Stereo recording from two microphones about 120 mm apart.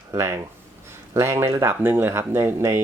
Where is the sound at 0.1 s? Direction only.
25° right (ahead or behind).